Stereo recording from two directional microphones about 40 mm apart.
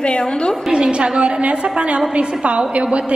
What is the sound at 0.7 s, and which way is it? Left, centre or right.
A woman's voice, right.